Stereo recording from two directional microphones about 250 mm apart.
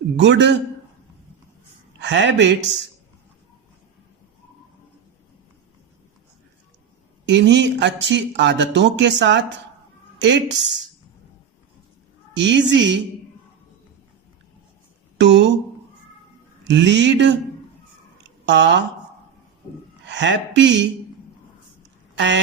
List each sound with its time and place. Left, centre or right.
0.2 s speech: right
2.0 s speech: right
7.3 s speech: right
12.3 s speech: right
15.2 s speech: right
16.6 s speech: right
18.2 s a sound: right
20.1 s speech: right
22.1 s a sound: right